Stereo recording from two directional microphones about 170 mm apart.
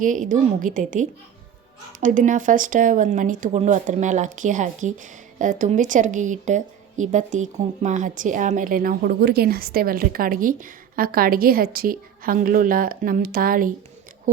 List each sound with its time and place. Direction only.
0.0 s a woman's voice: 50° right (ahead or behind)